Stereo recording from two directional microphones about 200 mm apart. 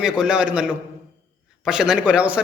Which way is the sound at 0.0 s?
5° right (ahead or behind).